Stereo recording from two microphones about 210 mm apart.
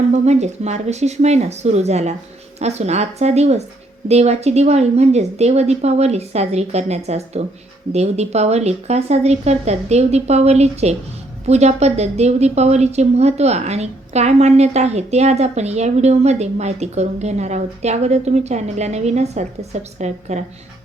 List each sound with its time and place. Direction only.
0.1 s a woman's voice: 30° right (ahead or behind)